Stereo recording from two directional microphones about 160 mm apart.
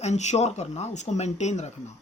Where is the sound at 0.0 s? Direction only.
45° left (ahead or behind).